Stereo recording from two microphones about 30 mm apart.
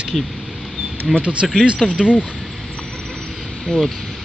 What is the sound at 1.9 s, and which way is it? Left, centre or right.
Speech, right.